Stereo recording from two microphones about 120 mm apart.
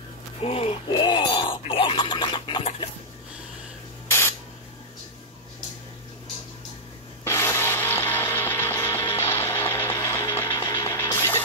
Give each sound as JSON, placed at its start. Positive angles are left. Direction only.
{"t": 0.4, "sound": "a sound", "side_deg": 55}
{"t": 4.1, "sound": "spray", "side_deg": 20}
{"t": 7.2, "sound": "music", "side_deg": 20}